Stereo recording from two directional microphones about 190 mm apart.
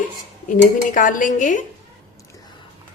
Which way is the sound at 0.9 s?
45° left (ahead or behind).